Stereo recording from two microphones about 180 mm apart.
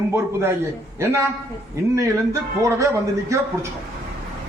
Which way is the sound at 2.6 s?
20° right (ahead or behind).